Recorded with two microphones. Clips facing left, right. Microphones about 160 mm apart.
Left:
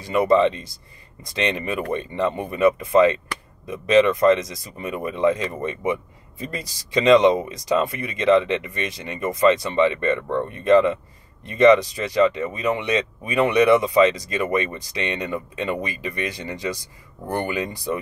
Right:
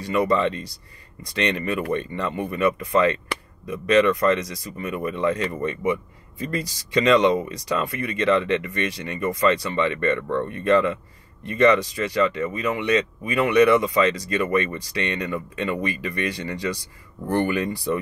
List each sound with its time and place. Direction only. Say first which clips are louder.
0.1 s speech: left 4 dB; 20° left (ahead or behind)
7.1 s speech: left 4 dB; 20° left (ahead or behind)